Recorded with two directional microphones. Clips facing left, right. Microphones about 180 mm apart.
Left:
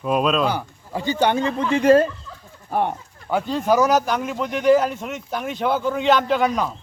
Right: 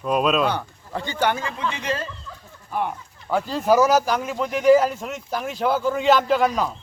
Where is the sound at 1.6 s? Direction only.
50° left (ahead or behind).